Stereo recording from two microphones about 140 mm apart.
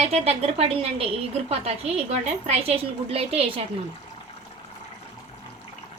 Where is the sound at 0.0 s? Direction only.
50° right (ahead or behind).